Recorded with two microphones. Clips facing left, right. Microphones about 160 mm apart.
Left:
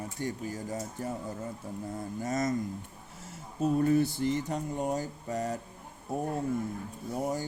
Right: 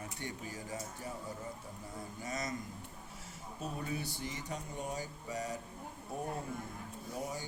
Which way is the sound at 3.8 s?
50° left (ahead or behind).